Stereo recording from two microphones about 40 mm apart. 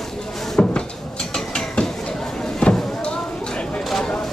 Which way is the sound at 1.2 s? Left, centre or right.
Centre.